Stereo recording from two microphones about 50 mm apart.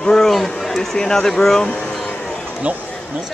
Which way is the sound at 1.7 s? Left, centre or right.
Centre.